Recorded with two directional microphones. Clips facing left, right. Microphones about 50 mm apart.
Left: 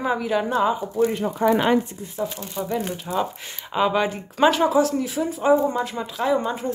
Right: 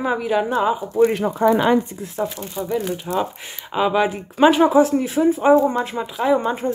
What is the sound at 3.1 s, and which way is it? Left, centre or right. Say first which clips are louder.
Speech: right 2 dB; centre.